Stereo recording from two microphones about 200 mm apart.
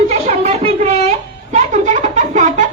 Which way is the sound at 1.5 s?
35° right (ahead or behind).